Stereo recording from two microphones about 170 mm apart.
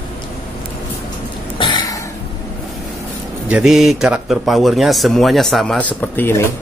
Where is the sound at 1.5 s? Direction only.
25° left (ahead or behind).